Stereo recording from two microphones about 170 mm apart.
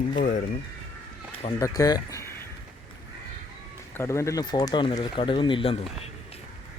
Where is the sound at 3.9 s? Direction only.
15° left (ahead or behind); by 5.8 s 30° left (ahead or behind).